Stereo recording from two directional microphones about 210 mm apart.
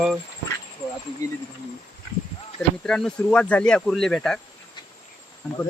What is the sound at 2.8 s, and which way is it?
Speech, 5° left (ahead or behind).